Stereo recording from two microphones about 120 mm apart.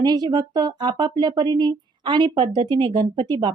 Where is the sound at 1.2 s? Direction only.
35° right (ahead or behind).